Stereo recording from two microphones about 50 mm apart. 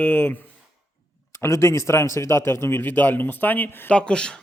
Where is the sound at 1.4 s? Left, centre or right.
Left.